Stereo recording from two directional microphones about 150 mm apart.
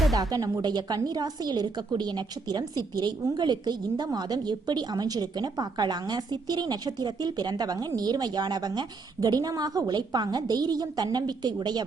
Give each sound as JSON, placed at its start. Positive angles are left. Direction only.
{"t": 0.2, "sound": "a woman's voice", "side_deg": -25}